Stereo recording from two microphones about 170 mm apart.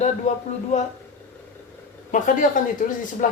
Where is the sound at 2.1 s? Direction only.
50° left (ahead or behind).